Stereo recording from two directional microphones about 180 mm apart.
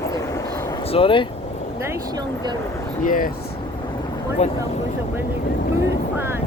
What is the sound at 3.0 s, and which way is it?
Speech, 50° left (ahead or behind).